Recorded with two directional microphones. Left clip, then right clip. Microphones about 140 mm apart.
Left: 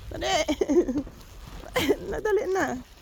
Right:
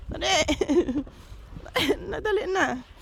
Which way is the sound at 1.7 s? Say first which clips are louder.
Even; 25° right (ahead or behind).